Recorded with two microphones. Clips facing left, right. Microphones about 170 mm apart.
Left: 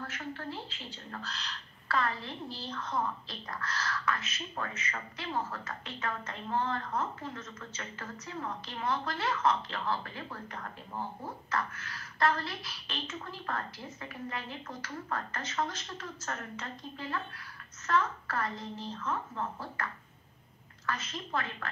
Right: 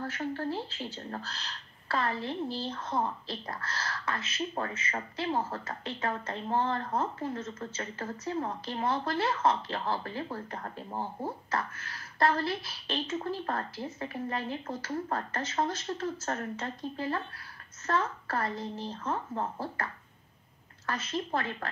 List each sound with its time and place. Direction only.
0.0 s a woman's voice: 35° right (ahead or behind)